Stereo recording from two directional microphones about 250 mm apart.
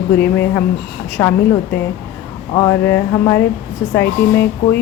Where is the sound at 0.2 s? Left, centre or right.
Centre.